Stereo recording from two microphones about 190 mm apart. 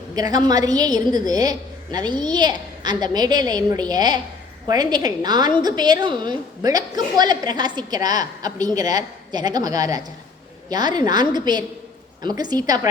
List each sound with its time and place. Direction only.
0.2 s a woman's voice: 20° right (ahead or behind)